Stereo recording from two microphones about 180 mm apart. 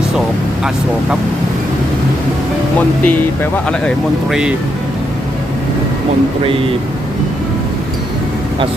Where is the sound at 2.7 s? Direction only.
10° left (ahead or behind).